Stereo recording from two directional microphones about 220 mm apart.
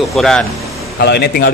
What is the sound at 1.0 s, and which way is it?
Speech, 45° left (ahead or behind).